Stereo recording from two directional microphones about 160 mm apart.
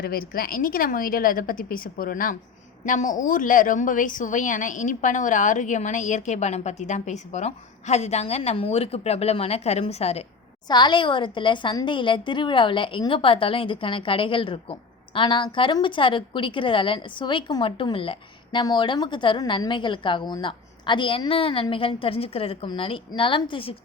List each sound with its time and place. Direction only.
0.0 s a woman's voice: 70° left (ahead or behind); by 10.2 s 40° left (ahead or behind)
10.7 s a woman's voice: 30° left (ahead or behind)